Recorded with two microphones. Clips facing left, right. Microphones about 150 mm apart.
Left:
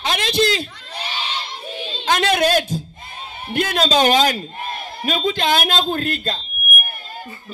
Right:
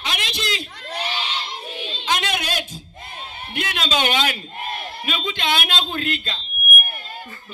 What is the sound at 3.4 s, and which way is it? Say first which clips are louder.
A man's voice: left 8 dB; 40° left (ahead or behind).